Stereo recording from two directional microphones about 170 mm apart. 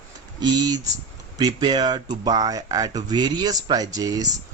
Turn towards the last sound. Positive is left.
turn(degrees=-20)  # may be behind; listen again after turning